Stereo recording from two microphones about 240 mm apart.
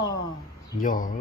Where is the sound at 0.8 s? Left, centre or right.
Left.